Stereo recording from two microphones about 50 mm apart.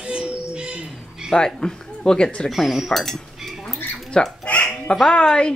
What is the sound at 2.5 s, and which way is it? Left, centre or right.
Dishes, centre.